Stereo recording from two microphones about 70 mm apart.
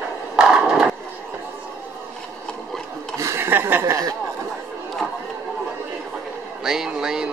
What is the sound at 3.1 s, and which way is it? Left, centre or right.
Chuckle, right.